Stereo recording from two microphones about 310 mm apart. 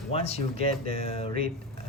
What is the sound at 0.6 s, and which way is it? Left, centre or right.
Speech, right.